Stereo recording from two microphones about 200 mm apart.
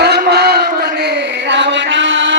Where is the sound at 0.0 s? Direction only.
55° right (ahead or behind).